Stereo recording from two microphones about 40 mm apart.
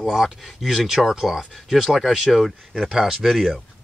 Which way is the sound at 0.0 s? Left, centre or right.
Centre.